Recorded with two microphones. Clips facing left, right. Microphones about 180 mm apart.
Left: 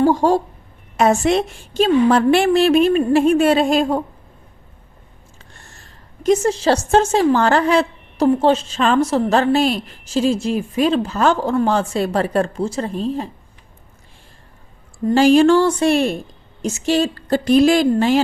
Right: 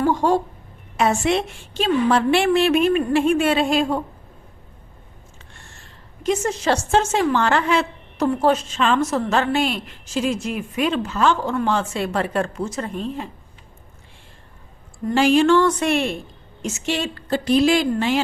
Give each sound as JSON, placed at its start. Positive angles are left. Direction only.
{"t": 0.0, "sound": "a sound", "side_deg": 35}
{"t": 0.9, "sound": "a woman's voice", "side_deg": 40}
{"t": 5.6, "sound": "a woman's voice", "side_deg": 40}
{"t": 15.1, "sound": "a woman's voice", "side_deg": 40}